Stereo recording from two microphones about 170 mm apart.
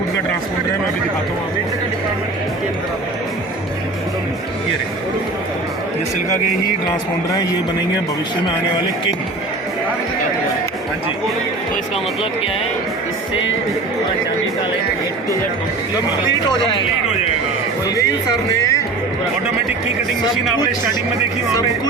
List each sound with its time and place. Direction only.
17.8 s speech: 20° left (ahead or behind)